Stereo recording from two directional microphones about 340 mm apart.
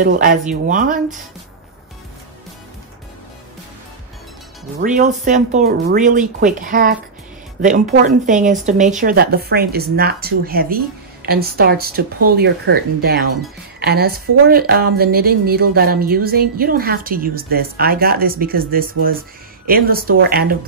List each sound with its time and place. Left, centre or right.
0.0 s speech: right
4.7 s speech: right